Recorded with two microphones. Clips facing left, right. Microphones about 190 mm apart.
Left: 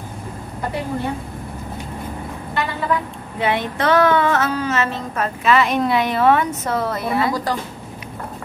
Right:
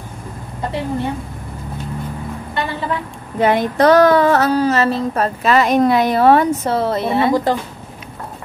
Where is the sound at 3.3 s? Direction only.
40° right (ahead or behind); by 7.5 s 25° right (ahead or behind).